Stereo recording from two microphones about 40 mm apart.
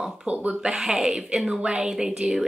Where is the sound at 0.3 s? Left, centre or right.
Right.